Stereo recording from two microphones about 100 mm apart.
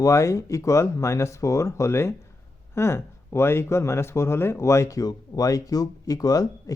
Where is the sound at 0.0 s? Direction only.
30° left (ahead or behind).